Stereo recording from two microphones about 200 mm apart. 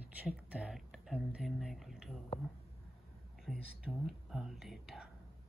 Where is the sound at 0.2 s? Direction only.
5° right (ahead or behind).